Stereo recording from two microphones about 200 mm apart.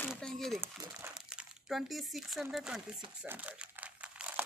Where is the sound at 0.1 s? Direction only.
Centre (ahead or behind).